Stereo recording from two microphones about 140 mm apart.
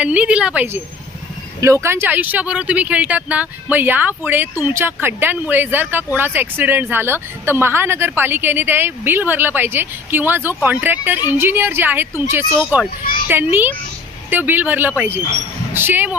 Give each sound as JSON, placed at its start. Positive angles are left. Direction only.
{"t": 0.0, "sound": "speech", "side_deg": -10}